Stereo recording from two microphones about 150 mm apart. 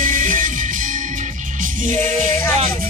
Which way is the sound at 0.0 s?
60° right (ahead or behind).